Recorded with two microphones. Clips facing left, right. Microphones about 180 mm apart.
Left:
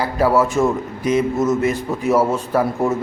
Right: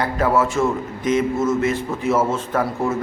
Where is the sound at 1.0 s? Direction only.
35° left (ahead or behind).